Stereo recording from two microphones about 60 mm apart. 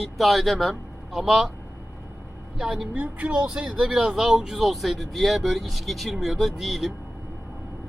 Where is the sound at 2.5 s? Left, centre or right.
Centre.